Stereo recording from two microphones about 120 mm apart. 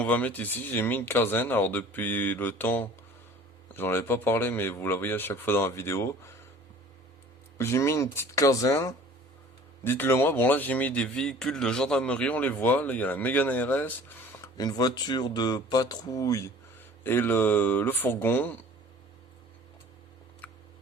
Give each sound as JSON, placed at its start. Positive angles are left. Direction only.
{"t": 0.0, "sound": "a man's voice", "side_deg": 15}
{"t": 7.6, "sound": "a man's voice", "side_deg": 25}
{"t": 14.4, "sound": "speech", "side_deg": 35}
{"t": 17.0, "sound": "a man's voice", "side_deg": 20}
{"t": 20.4, "sound": "a sound", "side_deg": 10}